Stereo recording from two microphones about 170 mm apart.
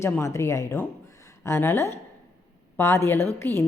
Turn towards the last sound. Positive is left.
turn(degrees=15)  # may be behind; listen again after turning